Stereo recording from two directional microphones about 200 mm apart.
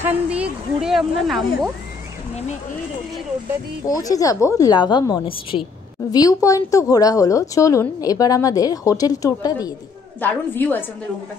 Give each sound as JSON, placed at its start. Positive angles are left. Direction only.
{"t": 0.0, "sound": "a woman's voice", "side_deg": -5}
{"t": 3.8, "sound": "a woman's voice", "side_deg": 15}